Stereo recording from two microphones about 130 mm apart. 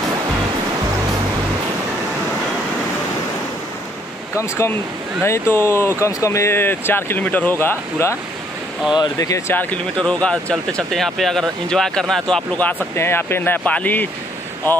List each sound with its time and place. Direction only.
4.4 s speech: 20° left (ahead or behind)
9.5 s speech: 15° left (ahead or behind)